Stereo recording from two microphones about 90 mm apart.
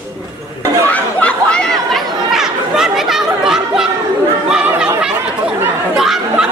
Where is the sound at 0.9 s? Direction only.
10° left (ahead or behind); by 3.9 s 5° right (ahead or behind).